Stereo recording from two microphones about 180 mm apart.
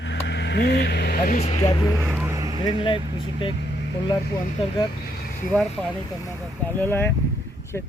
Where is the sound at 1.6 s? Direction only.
20° left (ahead or behind).